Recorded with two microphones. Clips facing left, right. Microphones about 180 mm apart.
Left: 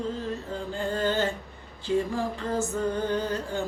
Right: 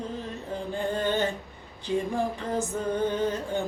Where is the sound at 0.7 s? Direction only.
15° right (ahead or behind).